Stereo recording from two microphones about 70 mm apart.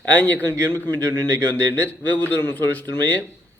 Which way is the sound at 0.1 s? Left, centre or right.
Left.